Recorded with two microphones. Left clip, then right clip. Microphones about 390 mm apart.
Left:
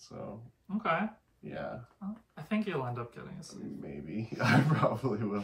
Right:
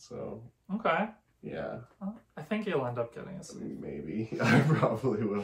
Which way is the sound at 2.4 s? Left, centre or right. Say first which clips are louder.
Right 3 dB; centre.